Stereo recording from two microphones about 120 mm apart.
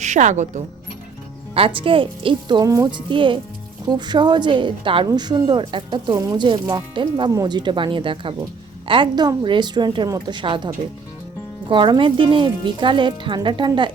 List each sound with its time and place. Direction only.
0.0 s speech: 85° right
1.5 s speech: 50° right (ahead or behind)
2.6 s music: 25° right (ahead or behind)
2.9 s a woman's voice: 45° right (ahead or behind)
6.1 s music: 25° right (ahead or behind)
6.4 s a woman's voice: 40° right (ahead or behind)
11.7 s speech: 45° right (ahead or behind)